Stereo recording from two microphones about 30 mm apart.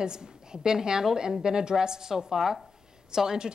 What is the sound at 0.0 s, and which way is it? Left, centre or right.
A woman's voice, right.